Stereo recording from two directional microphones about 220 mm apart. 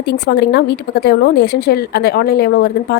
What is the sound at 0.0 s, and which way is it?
A woman's voice, 50° left (ahead or behind).